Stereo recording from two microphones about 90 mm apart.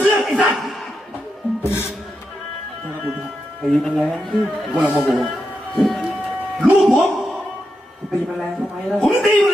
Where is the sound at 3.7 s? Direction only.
Centre (ahead or behind).